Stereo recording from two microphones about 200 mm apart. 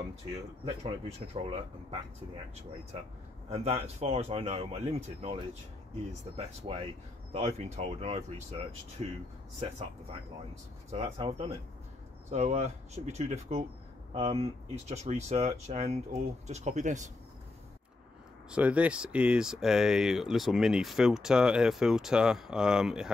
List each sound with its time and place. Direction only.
0.8 s speech: 30° right (ahead or behind)
3.4 s speech: 30° right (ahead or behind)
10.9 s speech: 30° right (ahead or behind)
18.5 s speech: 5° right (ahead or behind)